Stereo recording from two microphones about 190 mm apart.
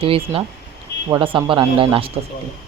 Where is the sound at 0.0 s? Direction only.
30° right (ahead or behind).